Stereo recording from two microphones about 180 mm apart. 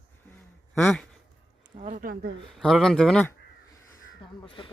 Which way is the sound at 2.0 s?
55° right (ahead or behind).